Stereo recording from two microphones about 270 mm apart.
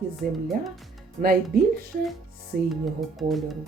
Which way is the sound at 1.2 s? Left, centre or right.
Right.